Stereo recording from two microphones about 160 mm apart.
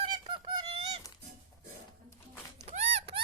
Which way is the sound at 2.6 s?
45° right (ahead or behind).